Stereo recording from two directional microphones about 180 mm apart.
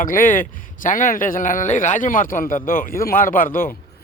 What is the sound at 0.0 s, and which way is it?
A man's voice, 50° left (ahead or behind).